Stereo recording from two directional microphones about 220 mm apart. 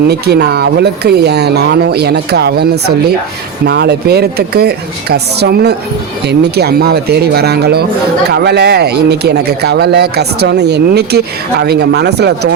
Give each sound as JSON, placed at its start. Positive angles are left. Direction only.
{"t": 0.1, "sound": "speech", "side_deg": -50}